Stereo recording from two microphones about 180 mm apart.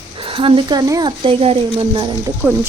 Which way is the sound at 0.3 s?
30° right (ahead or behind).